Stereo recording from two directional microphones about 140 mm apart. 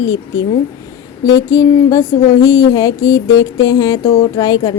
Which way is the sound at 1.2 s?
25° left (ahead or behind).